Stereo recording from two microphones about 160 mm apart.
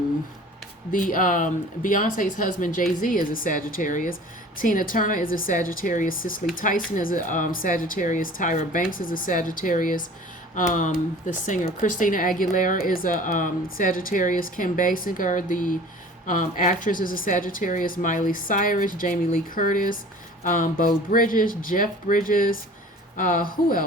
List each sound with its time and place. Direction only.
0.9 s speech: 60° left (ahead or behind)